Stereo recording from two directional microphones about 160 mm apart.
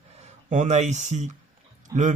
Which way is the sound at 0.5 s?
45° right (ahead or behind).